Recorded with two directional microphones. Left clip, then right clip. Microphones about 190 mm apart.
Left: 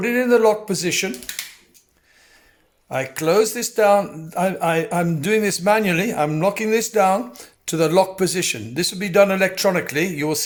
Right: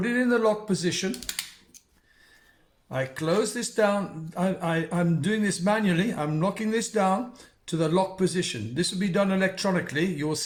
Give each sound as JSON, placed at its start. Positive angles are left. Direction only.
{"t": 0.0, "sound": "speech", "side_deg": 45}
{"t": 2.9, "sound": "a man's voice", "side_deg": 45}